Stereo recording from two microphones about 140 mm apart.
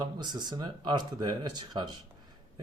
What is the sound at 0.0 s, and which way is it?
Speech, 30° right (ahead or behind).